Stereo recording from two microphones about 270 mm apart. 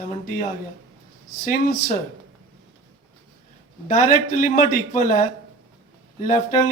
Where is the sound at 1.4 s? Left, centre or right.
Left.